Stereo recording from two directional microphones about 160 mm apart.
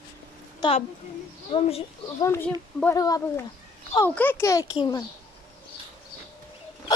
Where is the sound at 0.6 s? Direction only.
35° left (ahead or behind).